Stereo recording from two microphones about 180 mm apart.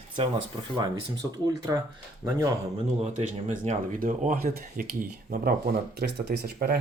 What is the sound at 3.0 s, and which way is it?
Speech, 40° right (ahead or behind).